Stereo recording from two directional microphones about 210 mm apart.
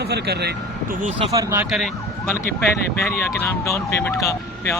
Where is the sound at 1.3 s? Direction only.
15° right (ahead or behind).